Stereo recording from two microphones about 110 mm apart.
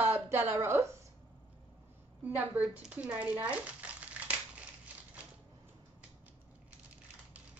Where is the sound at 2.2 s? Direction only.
15° right (ahead or behind).